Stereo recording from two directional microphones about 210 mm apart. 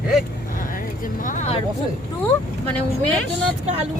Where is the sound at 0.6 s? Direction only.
40° left (ahead or behind).